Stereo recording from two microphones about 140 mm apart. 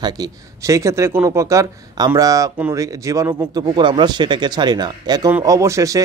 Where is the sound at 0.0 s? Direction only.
25° right (ahead or behind).